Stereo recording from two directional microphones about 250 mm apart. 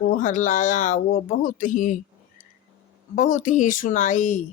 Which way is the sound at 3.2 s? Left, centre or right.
Left.